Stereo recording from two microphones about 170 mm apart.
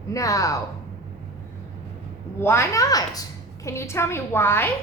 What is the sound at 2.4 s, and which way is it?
A woman's voice, 15° left (ahead or behind).